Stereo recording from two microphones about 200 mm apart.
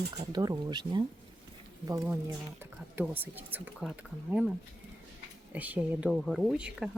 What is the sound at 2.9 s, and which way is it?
Speech, 10° right (ahead or behind).